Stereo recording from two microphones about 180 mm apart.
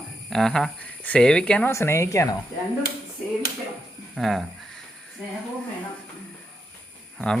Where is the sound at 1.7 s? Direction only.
15° left (ahead or behind).